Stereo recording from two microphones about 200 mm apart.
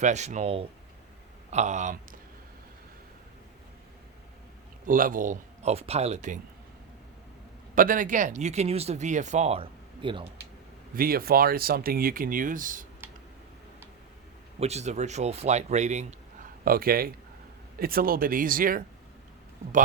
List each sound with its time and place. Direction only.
0.0 s speech: 35° right (ahead or behind)
4.9 s speech: 45° right (ahead or behind)
7.8 s speech: 40° right (ahead or behind); by 10.2 s 25° right (ahead or behind)
10.9 s speech: 45° right (ahead or behind)
13.0 s a sound: 10° right (ahead or behind)
14.6 s speech: 35° right (ahead or behind)
16.6 s speech: 45° right (ahead or behind)